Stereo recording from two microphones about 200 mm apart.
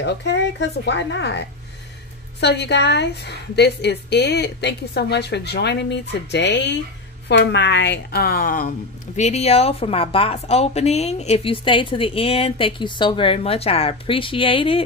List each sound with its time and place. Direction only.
0.0 s a woman's voice: 60° left (ahead or behind)
2.4 s a woman's voice: 55° left (ahead or behind); by 14.8 s 25° left (ahead or behind)